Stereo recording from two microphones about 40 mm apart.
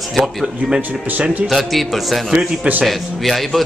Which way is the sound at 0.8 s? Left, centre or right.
Right.